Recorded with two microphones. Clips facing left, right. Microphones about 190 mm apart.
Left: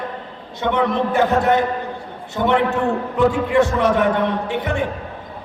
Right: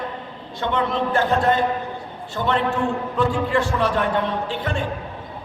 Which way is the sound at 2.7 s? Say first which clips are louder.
Left 3 dB; 20° left (ahead or behind).